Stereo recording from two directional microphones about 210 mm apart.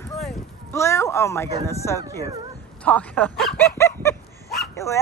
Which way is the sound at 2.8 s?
5° left (ahead or behind).